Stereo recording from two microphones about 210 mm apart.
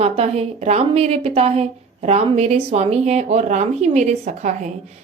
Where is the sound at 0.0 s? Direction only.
30° right (ahead or behind).